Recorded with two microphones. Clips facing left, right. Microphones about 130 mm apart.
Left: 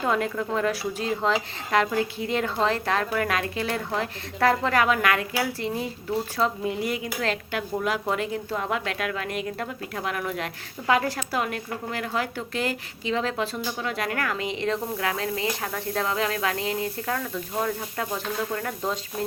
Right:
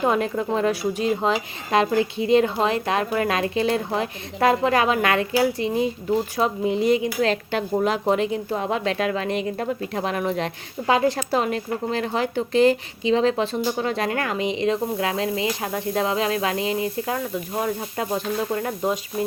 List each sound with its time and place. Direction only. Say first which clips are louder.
0.0 s speech: right 4 dB; 20° right (ahead or behind)